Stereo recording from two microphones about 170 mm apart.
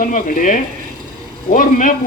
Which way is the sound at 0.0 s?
55° left (ahead or behind).